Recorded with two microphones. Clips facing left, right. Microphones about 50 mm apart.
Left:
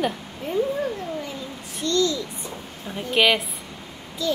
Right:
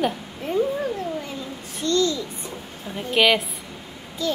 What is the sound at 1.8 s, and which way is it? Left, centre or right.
Speech, right.